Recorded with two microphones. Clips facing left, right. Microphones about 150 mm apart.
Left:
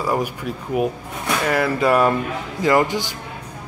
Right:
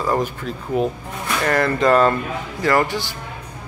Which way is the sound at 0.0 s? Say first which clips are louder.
Right 1 dB; 10° left (ahead or behind).